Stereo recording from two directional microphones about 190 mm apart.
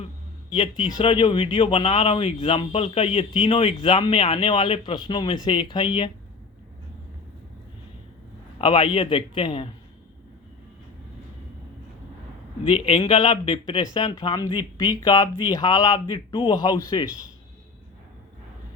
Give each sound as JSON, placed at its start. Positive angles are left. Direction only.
{"t": 0.5, "sound": "speech", "side_deg": 25}
{"t": 8.5, "sound": "speech", "side_deg": 25}
{"t": 12.6, "sound": "speech", "side_deg": 30}